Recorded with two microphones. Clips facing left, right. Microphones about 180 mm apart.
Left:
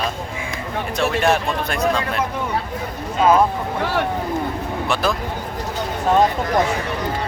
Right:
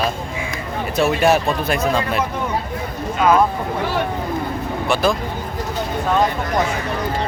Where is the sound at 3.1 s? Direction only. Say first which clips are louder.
Even; 25° left (ahead or behind).